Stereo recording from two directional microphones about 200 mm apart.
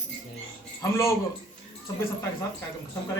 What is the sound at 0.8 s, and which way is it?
Speech, 15° left (ahead or behind).